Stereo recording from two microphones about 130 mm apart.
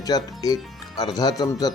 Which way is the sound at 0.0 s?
30° left (ahead or behind).